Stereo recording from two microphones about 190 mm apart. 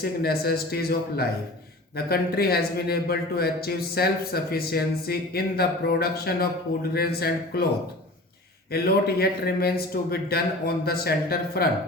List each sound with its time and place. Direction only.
0.0 s speech: 55° left (ahead or behind)
8.7 s speech: 55° left (ahead or behind)